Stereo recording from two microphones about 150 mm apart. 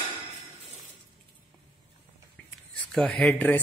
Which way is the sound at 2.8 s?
5° left (ahead or behind).